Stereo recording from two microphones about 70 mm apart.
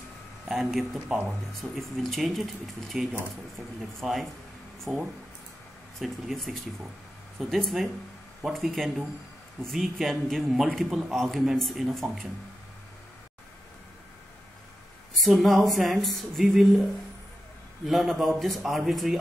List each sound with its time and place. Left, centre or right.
0.5 s speech: centre
1.0 s speech: centre
1.6 s a man's voice: centre
4.9 s speech: right
5.9 s a man's voice: centre
15.1 s a man's voice: centre
17.8 s a man's voice: centre